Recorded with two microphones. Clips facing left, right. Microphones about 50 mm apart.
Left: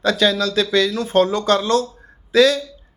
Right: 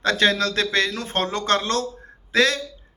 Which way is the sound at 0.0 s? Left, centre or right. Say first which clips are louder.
Left 2 dB; right.